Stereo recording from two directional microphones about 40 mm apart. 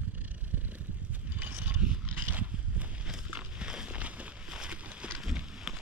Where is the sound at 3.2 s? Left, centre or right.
Right.